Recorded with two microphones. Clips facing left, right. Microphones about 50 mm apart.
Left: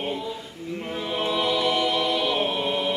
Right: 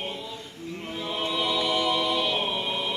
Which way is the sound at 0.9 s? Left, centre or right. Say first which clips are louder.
Left 3 dB; centre.